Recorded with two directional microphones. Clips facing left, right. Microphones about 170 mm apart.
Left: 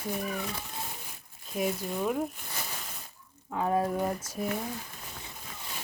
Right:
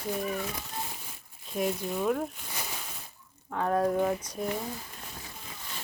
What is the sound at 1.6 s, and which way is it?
Speech, centre (ahead or behind).